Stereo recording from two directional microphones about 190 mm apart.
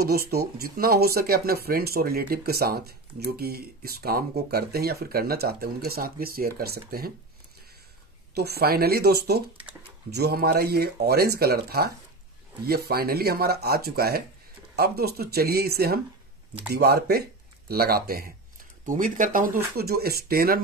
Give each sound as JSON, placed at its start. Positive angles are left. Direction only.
{"t": 0.0, "sound": "speech", "side_deg": -55}
{"t": 8.4, "sound": "speech", "side_deg": -55}